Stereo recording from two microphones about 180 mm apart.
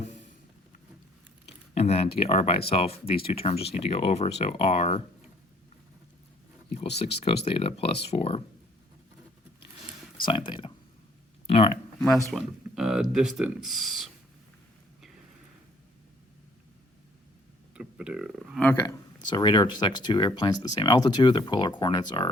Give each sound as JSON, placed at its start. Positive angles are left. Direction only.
{"t": 0.0, "sound": "a sound", "side_deg": 40}
{"t": 1.5, "sound": "speech", "side_deg": 35}
{"t": 7.0, "sound": "speech", "side_deg": 35}
{"t": 10.2, "sound": "speech", "side_deg": 25}
{"t": 11.9, "sound": "speech", "side_deg": 5}
{"t": 17.7, "sound": "speech", "side_deg": -5}
{"t": 18.6, "sound": "speech", "side_deg": 10}